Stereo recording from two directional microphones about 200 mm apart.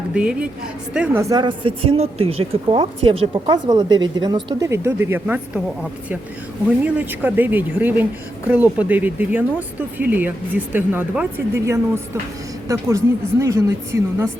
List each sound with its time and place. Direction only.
0.1 s a woman's voice: 5° right (ahead or behind)
6.8 s a woman's voice: 10° right (ahead or behind)